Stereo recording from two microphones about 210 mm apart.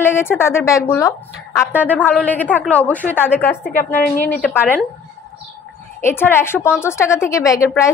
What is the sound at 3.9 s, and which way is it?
Speech, 10° left (ahead or behind).